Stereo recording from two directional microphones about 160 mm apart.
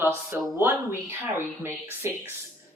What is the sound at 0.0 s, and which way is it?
Speech, 15° right (ahead or behind).